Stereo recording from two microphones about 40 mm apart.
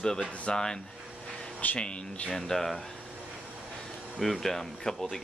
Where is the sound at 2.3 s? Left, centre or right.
Centre.